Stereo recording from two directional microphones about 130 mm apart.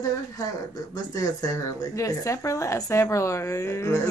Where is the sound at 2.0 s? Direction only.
25° left (ahead or behind).